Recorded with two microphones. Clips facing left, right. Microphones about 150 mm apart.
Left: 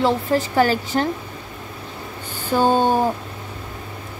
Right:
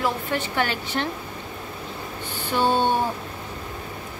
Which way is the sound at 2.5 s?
40° left (ahead or behind).